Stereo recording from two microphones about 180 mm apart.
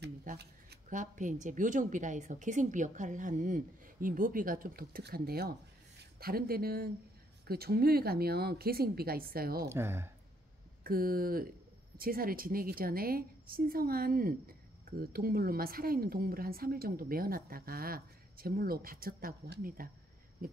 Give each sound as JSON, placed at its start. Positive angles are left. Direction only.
{"t": 0.0, "sound": "shuffling cards", "side_deg": -55}
{"t": 0.8, "sound": "a woman's voice", "side_deg": -45}
{"t": 9.7, "sound": "speech", "side_deg": -15}
{"t": 10.8, "sound": "a woman's voice", "side_deg": -55}